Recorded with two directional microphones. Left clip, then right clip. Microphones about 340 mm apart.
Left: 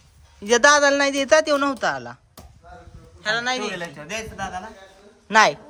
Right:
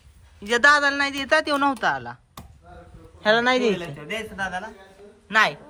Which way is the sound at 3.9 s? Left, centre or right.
Centre.